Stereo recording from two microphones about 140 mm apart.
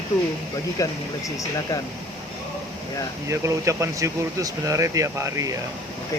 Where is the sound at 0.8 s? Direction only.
25° left (ahead or behind).